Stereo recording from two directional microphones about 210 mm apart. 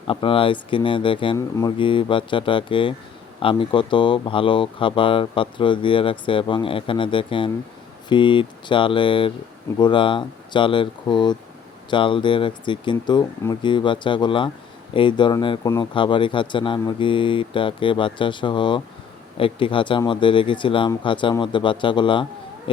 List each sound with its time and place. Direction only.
0.1 s speech: 25° left (ahead or behind)